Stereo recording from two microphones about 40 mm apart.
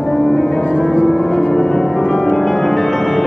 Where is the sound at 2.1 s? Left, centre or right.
Left.